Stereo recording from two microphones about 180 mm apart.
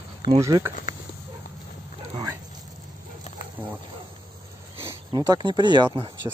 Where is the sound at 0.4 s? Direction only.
20° right (ahead or behind).